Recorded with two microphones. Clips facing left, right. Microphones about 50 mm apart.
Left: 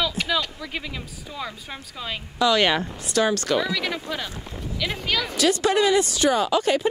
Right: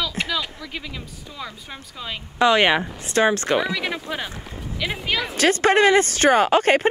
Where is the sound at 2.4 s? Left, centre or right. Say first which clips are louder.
Right 3 dB; right.